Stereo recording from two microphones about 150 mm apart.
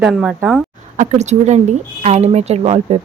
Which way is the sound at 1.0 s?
50° right (ahead or behind).